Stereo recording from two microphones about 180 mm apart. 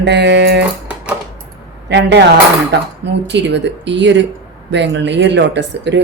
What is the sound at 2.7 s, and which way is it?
A woman's voice, 70° right (ahead or behind).